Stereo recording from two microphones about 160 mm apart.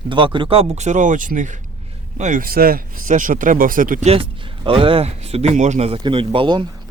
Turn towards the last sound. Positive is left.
turn(degrees=-35)  # may be behind; listen again after turning